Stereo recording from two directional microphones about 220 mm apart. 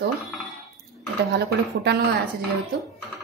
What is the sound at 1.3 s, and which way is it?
Speech, 50° right (ahead or behind).